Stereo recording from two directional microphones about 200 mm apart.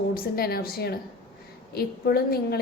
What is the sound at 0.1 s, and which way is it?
A woman's voice, 50° left (ahead or behind).